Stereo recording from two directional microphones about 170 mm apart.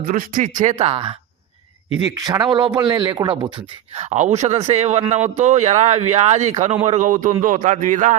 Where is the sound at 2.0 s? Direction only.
20° right (ahead or behind).